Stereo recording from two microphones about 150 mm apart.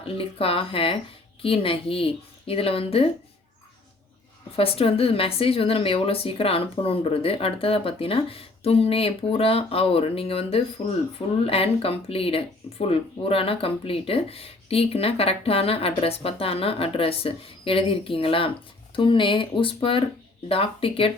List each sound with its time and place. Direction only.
0.0 s speech: 40° left (ahead or behind)
4.5 s speech: 40° left (ahead or behind)